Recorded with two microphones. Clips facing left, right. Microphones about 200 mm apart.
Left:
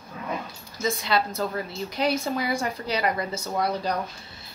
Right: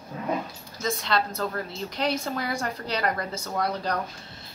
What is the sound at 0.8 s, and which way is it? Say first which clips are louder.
A woman's voice: left 2 dB; 5° left (ahead or behind).